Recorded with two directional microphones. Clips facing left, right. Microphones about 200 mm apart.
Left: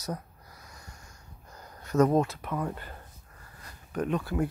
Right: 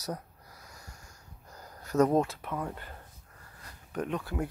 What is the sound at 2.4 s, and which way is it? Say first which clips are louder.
Speech: left 3 dB; 5° right (ahead or behind).